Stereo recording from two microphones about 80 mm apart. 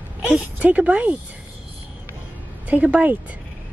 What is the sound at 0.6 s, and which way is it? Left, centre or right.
Speech, centre.